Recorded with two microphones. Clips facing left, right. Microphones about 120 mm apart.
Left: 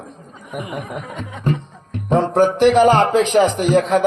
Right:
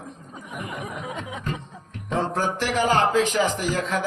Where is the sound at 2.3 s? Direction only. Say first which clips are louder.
Left 12 dB; 20° left (ahead or behind).